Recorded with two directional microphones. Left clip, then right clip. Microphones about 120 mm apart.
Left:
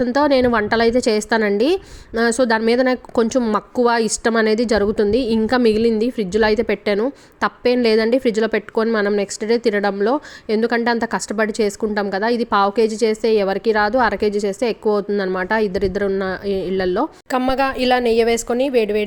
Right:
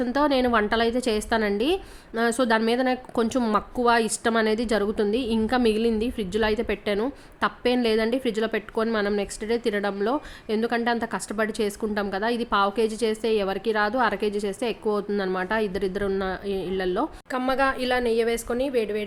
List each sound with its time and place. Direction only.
0.0 s a woman's voice: 45° left (ahead or behind)
17.3 s speech: 85° left